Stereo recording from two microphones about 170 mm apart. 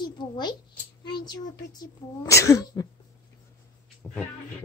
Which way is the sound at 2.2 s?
20° left (ahead or behind).